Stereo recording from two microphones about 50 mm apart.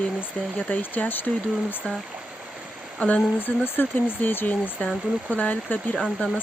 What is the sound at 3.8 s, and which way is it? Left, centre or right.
Speech, left.